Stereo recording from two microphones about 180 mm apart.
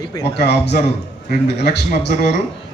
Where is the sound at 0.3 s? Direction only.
70° left (ahead or behind).